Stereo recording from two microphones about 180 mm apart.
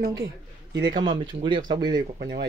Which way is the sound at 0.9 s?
25° right (ahead or behind).